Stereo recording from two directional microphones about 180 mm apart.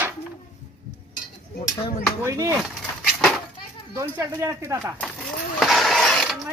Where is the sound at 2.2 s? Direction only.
15° right (ahead or behind).